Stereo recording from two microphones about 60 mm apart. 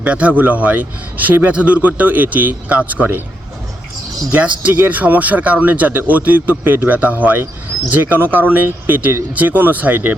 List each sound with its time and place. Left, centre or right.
0.0 s speech: right
4.3 s speech: right